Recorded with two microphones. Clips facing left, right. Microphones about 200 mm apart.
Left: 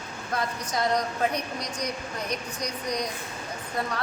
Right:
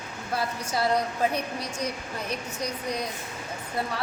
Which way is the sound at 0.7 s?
30° right (ahead or behind).